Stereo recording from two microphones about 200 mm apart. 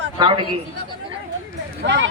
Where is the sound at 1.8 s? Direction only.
60° right (ahead or behind).